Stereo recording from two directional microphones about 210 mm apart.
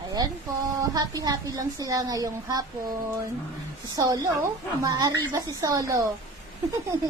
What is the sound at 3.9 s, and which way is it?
A woman's voice, 15° right (ahead or behind).